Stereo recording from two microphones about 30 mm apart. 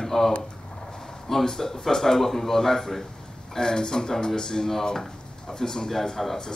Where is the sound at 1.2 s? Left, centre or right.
Centre.